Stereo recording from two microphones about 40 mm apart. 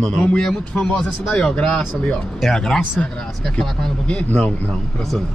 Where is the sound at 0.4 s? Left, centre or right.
Centre.